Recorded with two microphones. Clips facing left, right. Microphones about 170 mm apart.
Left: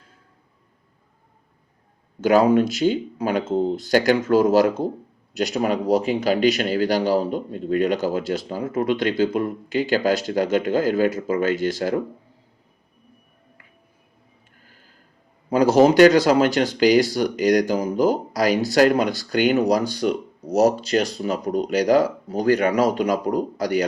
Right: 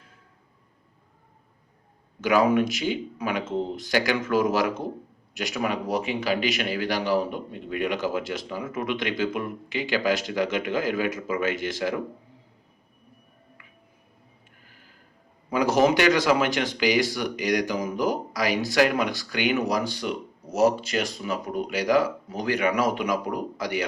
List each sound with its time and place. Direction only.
2.2 s speech: 35° left (ahead or behind)
15.4 s speech: 35° left (ahead or behind)